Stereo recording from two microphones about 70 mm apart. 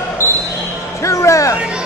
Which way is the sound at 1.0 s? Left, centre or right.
Left.